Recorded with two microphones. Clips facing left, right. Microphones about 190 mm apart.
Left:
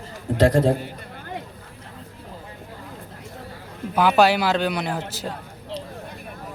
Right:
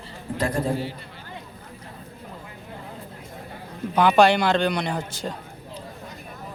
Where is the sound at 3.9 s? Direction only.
5° left (ahead or behind).